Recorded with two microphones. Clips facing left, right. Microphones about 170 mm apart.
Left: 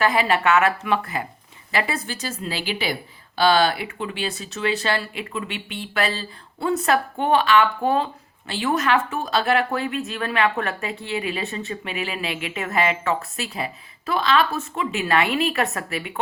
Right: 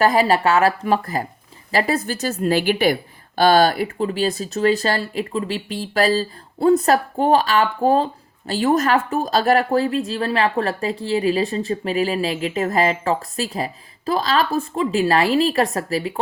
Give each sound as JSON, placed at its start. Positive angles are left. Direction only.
{"t": 0.0, "sound": "a woman's voice", "side_deg": -40}